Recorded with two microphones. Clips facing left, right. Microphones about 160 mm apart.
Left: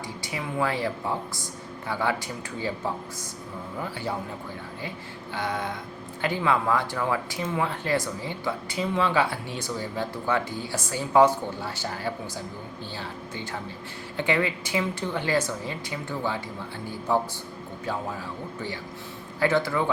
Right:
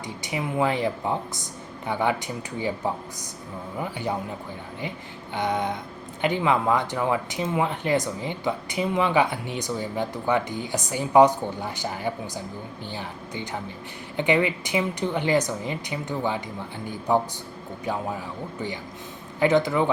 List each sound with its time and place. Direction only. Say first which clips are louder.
0.2 s a woman's voice: right 4 dB; 20° right (ahead or behind)
5.3 s a woman's voice: right 4 dB; 20° right (ahead or behind)
19.4 s speech: right 3 dB; 20° right (ahead or behind)